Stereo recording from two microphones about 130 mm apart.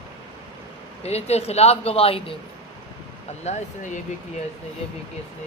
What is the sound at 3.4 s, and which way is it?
Speech, 60° left (ahead or behind).